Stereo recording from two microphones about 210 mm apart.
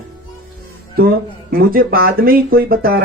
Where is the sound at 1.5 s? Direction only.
45° right (ahead or behind).